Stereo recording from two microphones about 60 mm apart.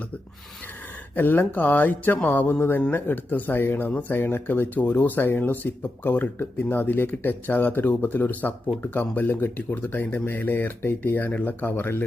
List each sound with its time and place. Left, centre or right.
1.1 s speech: left